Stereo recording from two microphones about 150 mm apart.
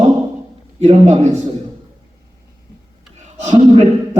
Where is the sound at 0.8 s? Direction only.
50° right (ahead or behind).